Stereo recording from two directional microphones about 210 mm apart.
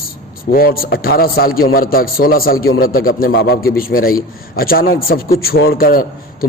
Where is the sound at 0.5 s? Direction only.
45° left (ahead or behind).